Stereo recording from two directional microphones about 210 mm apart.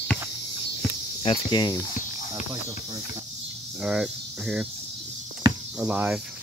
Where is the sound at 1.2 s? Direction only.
25° left (ahead or behind).